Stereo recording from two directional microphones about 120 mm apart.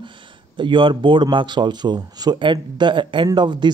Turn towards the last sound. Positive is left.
turn(degrees=-40)  # may be behind; listen again after turning